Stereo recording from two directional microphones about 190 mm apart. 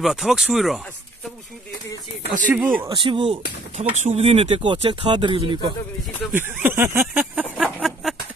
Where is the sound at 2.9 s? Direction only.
25° right (ahead or behind).